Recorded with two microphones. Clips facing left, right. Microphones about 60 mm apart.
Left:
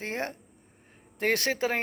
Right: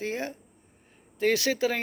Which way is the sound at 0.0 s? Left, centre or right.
Left.